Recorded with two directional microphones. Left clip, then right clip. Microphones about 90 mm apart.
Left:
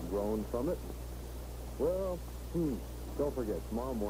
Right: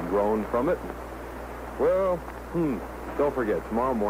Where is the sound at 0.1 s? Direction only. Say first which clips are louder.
Right 11 dB; 25° right (ahead or behind).